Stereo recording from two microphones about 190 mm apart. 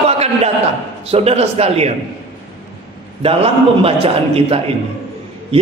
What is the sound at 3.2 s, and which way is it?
A man's voice, 30° right (ahead or behind).